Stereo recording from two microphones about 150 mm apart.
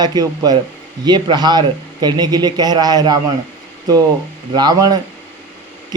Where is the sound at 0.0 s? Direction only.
25° right (ahead or behind).